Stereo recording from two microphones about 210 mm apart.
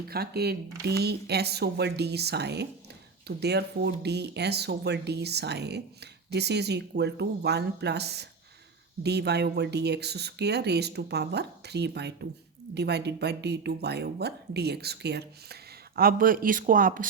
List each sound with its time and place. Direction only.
0.1 s speech: 50° right (ahead or behind)